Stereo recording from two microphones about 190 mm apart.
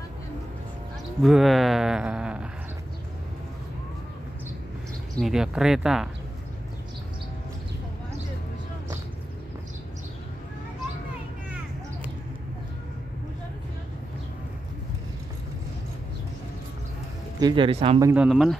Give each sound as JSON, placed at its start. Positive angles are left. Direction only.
{"t": 1.2, "sound": "speech", "side_deg": 0}
{"t": 5.2, "sound": "speech", "side_deg": -5}
{"t": 17.4, "sound": "speech", "side_deg": -25}
{"t": 18.0, "sound": "speech", "side_deg": -5}